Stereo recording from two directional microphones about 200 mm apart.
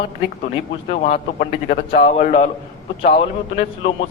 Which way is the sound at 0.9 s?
35° left (ahead or behind).